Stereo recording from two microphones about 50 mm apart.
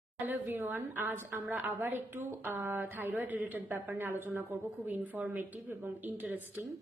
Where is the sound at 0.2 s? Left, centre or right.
Right.